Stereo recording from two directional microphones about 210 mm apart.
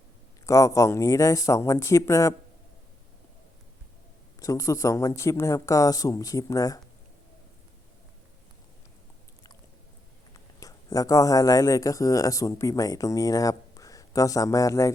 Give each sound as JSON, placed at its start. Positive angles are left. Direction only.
{"t": 0.4, "sound": "speech", "side_deg": 15}
{"t": 4.4, "sound": "speech", "side_deg": 15}
{"t": 10.3, "sound": "speech", "side_deg": 15}